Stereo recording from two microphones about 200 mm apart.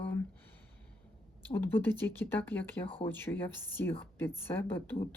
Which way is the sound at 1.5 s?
10° left (ahead or behind).